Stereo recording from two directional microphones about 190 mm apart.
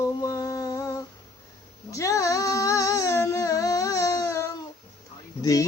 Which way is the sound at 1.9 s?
15° left (ahead or behind).